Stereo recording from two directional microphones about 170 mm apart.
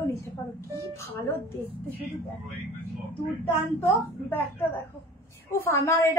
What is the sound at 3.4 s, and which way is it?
A woman's voice, 15° left (ahead or behind).